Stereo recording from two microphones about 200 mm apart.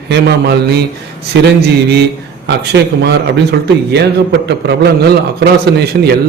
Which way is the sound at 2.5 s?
55° right (ahead or behind).